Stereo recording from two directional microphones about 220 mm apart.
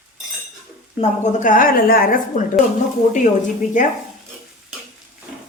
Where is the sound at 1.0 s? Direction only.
35° left (ahead or behind).